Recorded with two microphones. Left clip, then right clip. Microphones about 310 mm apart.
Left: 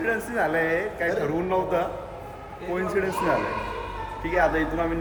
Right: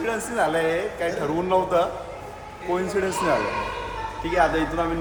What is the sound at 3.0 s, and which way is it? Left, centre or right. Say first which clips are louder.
Speech: even; centre.